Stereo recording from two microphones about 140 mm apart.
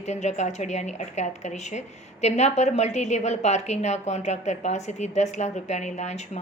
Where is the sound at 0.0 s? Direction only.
55° left (ahead or behind).